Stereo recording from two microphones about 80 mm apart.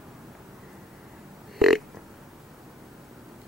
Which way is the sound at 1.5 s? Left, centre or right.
Centre.